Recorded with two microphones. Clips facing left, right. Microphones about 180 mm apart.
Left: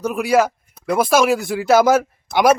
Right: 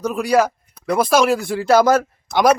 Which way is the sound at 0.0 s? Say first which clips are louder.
Even; 10° left (ahead or behind).